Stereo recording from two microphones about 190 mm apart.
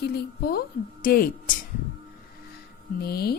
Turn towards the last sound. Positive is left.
turn(degrees=55)  # may be behind; listen again after turning